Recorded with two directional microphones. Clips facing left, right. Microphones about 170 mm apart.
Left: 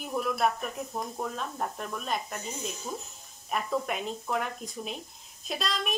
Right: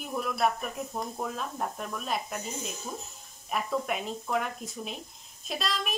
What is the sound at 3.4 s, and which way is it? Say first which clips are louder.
Speech: even; centre (ahead or behind).